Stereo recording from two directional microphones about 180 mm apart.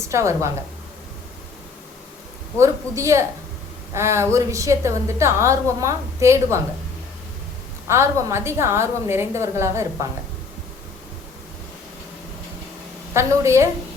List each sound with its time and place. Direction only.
0.0 s a woman's voice: 15° right (ahead or behind)
2.6 s a woman's voice: 15° right (ahead or behind)
7.9 s a woman's voice: 15° right (ahead or behind)
13.1 s a woman's voice: 15° right (ahead or behind)